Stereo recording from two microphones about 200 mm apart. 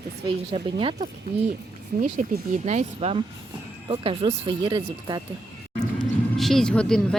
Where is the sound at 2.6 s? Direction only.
30° right (ahead or behind).